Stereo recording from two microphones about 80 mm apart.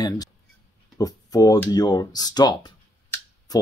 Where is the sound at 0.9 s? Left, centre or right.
Left.